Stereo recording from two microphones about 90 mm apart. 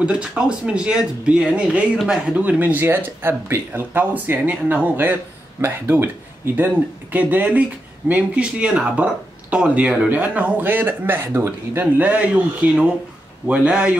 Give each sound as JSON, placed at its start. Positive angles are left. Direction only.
{"t": 0.0, "sound": "speech", "side_deg": -10}